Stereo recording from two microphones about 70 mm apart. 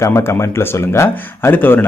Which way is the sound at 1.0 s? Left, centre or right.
Left.